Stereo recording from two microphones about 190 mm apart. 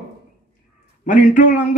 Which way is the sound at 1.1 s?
45° left (ahead or behind).